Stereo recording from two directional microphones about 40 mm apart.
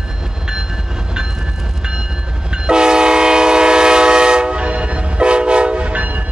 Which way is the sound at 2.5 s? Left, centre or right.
Right.